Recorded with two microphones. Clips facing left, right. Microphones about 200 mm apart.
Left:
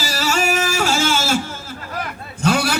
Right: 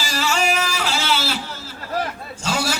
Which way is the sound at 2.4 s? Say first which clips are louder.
Left 6 dB; 60° left (ahead or behind).